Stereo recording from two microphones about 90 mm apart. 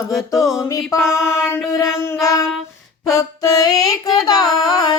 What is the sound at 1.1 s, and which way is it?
Music, 30° left (ahead or behind).